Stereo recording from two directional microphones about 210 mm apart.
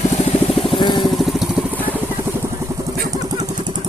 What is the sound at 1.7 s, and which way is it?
Vehicle, 10° left (ahead or behind).